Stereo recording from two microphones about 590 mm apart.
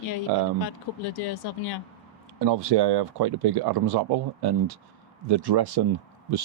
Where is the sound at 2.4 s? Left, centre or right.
Right.